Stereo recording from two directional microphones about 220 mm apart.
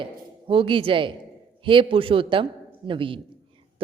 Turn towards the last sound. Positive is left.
turn(degrees=-25)  # may be behind; listen again after turning